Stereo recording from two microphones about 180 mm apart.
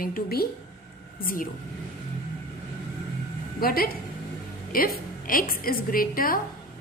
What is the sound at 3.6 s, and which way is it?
A woman's voice, 55° left (ahead or behind).